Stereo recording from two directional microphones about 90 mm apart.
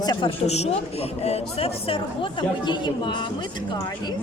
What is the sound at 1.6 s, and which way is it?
Speech, 90° left.